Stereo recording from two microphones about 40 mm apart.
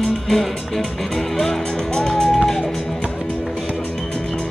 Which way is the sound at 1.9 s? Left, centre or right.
Centre.